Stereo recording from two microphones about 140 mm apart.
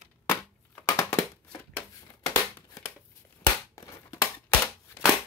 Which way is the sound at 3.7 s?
20° left (ahead or behind).